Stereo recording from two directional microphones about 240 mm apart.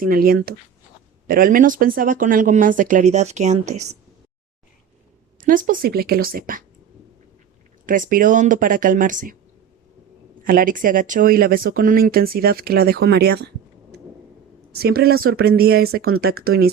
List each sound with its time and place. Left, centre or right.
0.0 s speech: right
5.4 s speech: right
7.9 s speech: right
10.4 s speech: right
14.7 s speech: right